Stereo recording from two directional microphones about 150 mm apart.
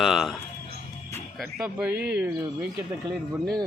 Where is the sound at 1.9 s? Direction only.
90° right.